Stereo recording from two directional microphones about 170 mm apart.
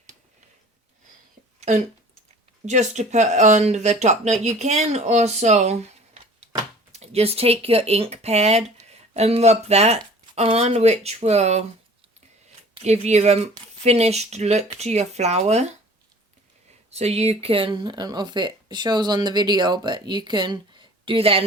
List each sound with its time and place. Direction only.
2.6 s speech: 45° right (ahead or behind)
6.9 s speech: 40° right (ahead or behind)
12.8 s speech: 40° right (ahead or behind)
16.9 s speech: 40° right (ahead or behind)